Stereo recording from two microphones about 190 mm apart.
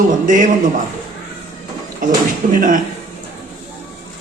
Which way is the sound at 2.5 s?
45° right (ahead or behind).